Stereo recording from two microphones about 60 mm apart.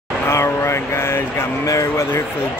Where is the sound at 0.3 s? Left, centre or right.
Left.